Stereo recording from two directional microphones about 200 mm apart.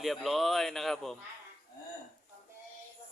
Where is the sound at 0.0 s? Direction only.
Centre (ahead or behind).